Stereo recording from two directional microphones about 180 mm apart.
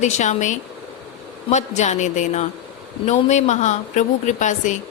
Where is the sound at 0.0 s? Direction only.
40° left (ahead or behind).